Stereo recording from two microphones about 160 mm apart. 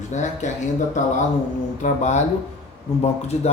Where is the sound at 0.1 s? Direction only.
50° left (ahead or behind).